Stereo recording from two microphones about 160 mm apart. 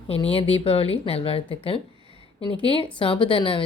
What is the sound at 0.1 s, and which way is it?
A woman's voice, 35° left (ahead or behind).